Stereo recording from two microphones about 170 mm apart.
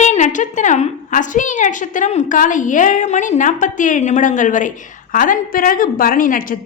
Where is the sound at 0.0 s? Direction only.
45° left (ahead or behind).